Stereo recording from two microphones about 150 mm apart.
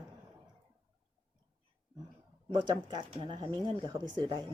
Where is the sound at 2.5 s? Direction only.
30° right (ahead or behind).